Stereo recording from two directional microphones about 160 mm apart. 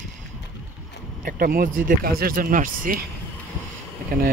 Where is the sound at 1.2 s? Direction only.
65° right (ahead or behind).